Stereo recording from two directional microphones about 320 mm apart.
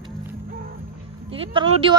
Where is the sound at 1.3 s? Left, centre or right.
Centre.